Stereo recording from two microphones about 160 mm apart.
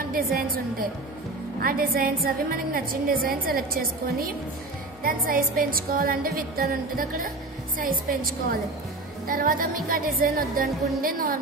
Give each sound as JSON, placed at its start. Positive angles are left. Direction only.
{"t": 0.1, "sound": "music", "side_deg": -65}
{"t": 5.0, "sound": "music", "side_deg": -60}